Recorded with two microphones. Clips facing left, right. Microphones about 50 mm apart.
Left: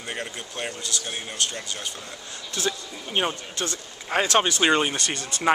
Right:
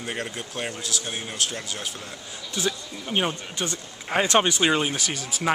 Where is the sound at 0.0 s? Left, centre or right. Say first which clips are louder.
Right 2 dB; centre.